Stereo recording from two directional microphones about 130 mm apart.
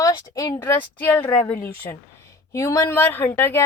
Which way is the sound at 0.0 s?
25° left (ahead or behind).